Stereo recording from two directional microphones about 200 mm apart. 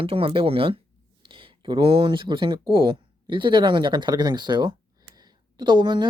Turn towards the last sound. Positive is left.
turn(degrees=-25)  # may be behind; listen again after turning